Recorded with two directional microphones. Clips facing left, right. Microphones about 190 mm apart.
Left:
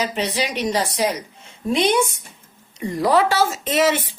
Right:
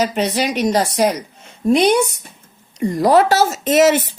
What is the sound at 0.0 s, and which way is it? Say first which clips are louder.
A woman's voice: right 5 dB; 45° right (ahead or behind).